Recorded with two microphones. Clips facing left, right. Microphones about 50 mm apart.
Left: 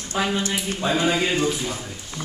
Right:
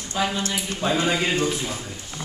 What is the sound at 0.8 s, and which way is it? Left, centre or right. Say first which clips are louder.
Speech: left 1 dB; centre.